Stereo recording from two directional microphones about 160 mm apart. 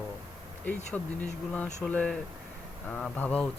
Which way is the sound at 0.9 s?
5° left (ahead or behind).